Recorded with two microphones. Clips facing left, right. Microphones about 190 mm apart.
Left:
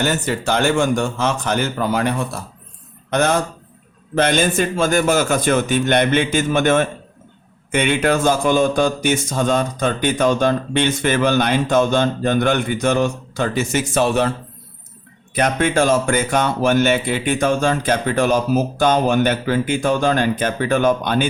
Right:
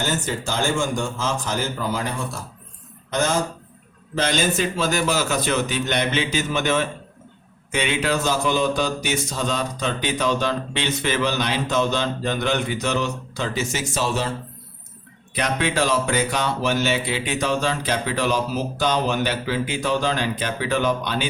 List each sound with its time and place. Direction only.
0.0 s a man's voice: 65° left (ahead or behind)
15.4 s speech: 50° left (ahead or behind)